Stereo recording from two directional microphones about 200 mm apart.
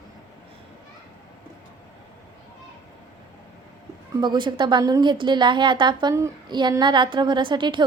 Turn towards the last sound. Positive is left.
turn(degrees=-25)  # may be behind; listen again after turning